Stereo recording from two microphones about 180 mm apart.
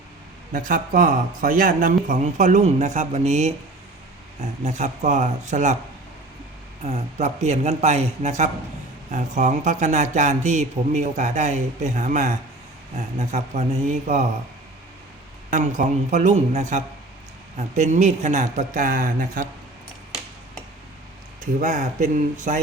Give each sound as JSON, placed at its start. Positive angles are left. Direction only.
{"t": 0.5, "sound": "a man's voice", "side_deg": -45}
{"t": 6.8, "sound": "a man's voice", "side_deg": -40}
{"t": 15.4, "sound": "a man's voice", "side_deg": -45}
{"t": 21.4, "sound": "speech", "side_deg": -45}